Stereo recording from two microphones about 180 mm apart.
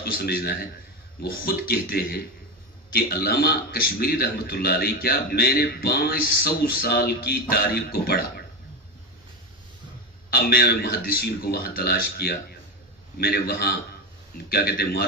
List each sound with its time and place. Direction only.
0.0 s a man's voice: 60° left (ahead or behind)
10.3 s a man's voice: 60° left (ahead or behind)